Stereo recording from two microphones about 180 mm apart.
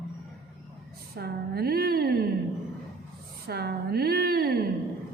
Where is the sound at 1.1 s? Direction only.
60° right (ahead or behind).